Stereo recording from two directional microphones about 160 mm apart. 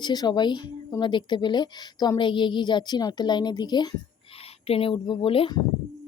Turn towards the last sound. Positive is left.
turn(degrees=35)  # may be behind; listen again after turning